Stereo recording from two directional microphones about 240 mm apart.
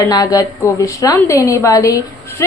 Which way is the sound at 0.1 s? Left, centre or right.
Centre.